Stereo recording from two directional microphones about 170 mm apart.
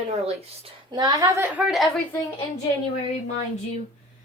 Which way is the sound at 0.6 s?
25° right (ahead or behind).